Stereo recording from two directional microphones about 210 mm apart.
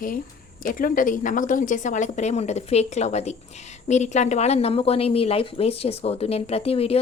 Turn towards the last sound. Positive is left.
turn(degrees=30)  # may be behind; listen again after turning